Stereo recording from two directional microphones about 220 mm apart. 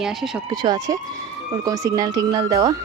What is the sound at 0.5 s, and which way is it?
A woman's voice, 20° right (ahead or behind).